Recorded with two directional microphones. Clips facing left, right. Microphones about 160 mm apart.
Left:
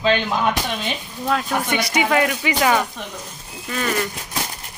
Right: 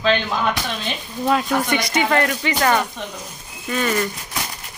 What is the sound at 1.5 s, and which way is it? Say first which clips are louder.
Speech: right 2 dB; 5° left (ahead or behind).